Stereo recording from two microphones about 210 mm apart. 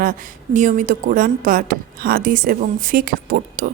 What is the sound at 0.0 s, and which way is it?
Speech, 40° right (ahead or behind).